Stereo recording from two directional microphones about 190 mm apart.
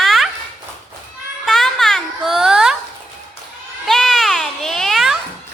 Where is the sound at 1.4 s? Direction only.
Centre (ahead or behind).